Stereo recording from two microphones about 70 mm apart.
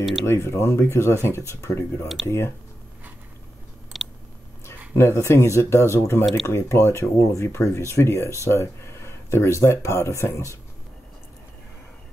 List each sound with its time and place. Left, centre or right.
0.2 s speech: left
3.9 s a sound: centre
4.6 s speech: left